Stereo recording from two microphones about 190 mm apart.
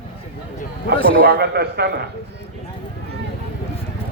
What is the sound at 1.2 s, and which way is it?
Speech, 55° right (ahead or behind).